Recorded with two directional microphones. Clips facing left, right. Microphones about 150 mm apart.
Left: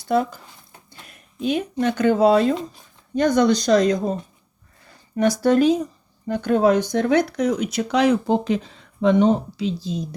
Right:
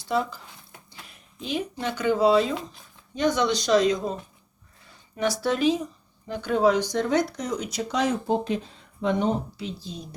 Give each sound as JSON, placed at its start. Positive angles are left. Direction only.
{"t": 1.1, "sound": "a sound", "side_deg": 55}
{"t": 1.8, "sound": "speech", "side_deg": 55}
{"t": 5.1, "sound": "speech", "side_deg": 50}